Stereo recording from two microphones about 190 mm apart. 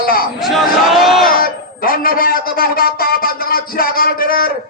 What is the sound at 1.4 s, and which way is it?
A man's voice, 50° left (ahead or behind).